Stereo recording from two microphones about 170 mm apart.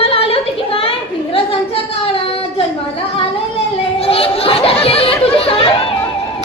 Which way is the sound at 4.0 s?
35° left (ahead or behind).